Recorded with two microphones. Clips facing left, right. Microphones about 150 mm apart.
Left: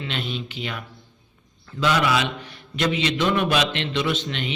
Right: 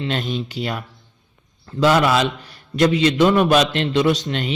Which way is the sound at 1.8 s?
45° right (ahead or behind).